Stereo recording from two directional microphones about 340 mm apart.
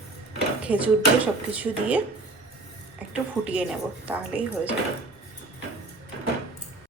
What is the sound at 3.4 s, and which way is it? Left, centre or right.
Speech, centre.